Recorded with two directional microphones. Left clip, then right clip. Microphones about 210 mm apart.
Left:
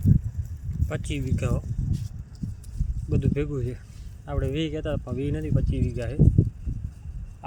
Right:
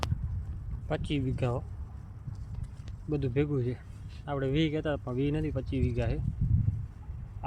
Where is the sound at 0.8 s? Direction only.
15° right (ahead or behind).